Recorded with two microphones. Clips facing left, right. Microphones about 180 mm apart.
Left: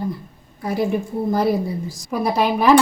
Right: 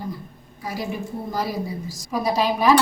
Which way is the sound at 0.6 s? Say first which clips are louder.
Left 8 dB; 55° left (ahead or behind).